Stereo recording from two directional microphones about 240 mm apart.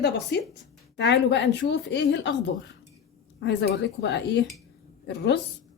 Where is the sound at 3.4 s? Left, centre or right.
Left.